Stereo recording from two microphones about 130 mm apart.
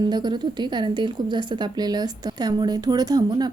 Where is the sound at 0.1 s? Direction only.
35° right (ahead or behind).